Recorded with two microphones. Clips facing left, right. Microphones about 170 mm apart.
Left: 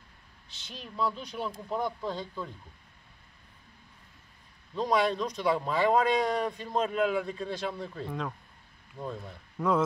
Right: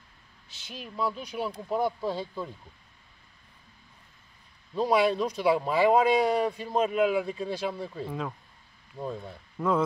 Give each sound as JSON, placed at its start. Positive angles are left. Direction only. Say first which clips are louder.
{"t": 0.7, "sound": "speech", "louder": "right 1 dB", "side_deg": -5}
{"t": 4.7, "sound": "speech", "louder": "right 3 dB", "side_deg": -5}